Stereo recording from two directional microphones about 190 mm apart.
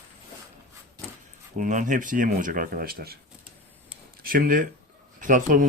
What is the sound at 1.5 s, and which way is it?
Speech, 40° right (ahead or behind).